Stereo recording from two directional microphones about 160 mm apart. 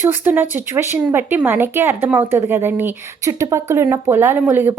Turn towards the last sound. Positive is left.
turn(degrees=-15)  # may be behind; listen again after turning